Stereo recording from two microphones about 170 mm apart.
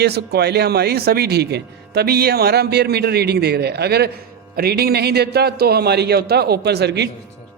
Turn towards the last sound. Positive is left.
turn(degrees=-75)  # may be behind; listen again after turning